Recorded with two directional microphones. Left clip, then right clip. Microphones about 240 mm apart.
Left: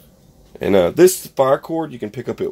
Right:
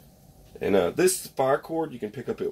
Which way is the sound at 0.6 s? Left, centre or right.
Left.